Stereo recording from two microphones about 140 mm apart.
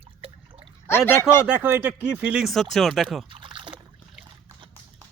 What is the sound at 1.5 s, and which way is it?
Speech, 15° right (ahead or behind).